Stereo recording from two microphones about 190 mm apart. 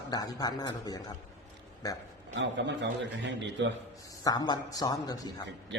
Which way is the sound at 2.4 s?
70° right (ahead or behind).